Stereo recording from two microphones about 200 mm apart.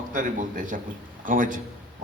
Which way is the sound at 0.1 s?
40° right (ahead or behind).